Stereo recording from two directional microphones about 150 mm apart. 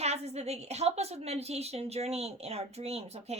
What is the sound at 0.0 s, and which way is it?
A woman's voice, 45° right (ahead or behind).